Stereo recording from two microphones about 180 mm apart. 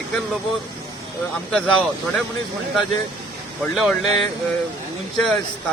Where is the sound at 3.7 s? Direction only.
Centre (ahead or behind).